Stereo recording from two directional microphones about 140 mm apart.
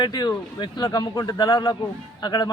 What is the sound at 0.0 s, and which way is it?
A man's voice, 30° left (ahead or behind).